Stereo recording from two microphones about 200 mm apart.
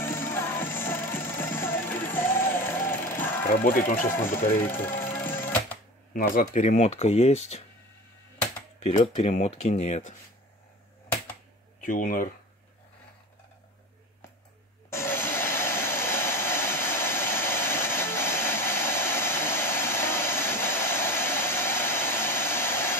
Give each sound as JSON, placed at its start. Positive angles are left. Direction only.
{"t": 0.0, "sound": "music", "side_deg": 10}
{"t": 3.4, "sound": "speech", "side_deg": 45}
{"t": 4.8, "sound": "music", "side_deg": 10}
{"t": 6.1, "sound": "speech", "side_deg": 40}
{"t": 8.7, "sound": "speech", "side_deg": 35}
{"t": 11.8, "sound": "speech", "side_deg": 40}
{"t": 14.9, "sound": "a sound", "side_deg": 10}